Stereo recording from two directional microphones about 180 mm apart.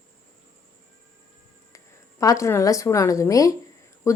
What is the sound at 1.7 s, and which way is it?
Speech, 15° left (ahead or behind).